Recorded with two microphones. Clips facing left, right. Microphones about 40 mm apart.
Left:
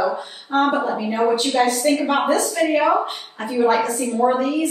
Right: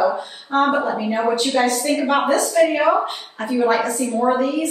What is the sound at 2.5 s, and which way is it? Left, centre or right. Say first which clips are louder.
Speech: right 3 dB; centre.